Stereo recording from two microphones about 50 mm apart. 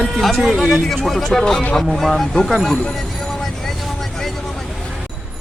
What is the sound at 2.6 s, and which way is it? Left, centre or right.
Vehicle, centre.